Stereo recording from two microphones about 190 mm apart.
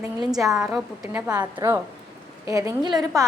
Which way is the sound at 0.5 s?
Centre (ahead or behind).